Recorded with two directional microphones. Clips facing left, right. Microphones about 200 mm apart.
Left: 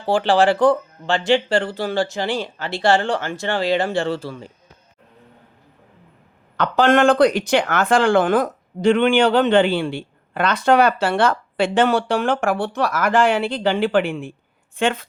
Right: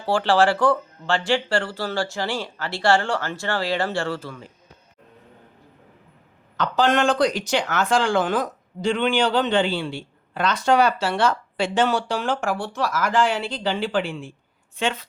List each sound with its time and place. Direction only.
0.0 s speech: 15° left (ahead or behind)
4.2 s speech: 30° left (ahead or behind)
6.6 s a woman's voice: 55° left (ahead or behind)